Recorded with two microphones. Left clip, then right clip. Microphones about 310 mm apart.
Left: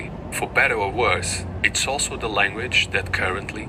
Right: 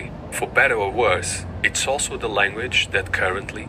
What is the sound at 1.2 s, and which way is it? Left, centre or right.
A man's voice, centre.